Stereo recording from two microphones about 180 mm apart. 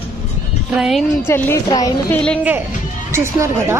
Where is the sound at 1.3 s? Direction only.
15° left (ahead or behind).